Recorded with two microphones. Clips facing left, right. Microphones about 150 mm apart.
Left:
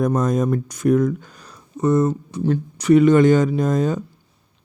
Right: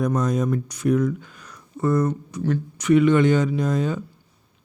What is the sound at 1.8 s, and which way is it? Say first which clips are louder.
A man's voice: left 3 dB; 20° left (ahead or behind).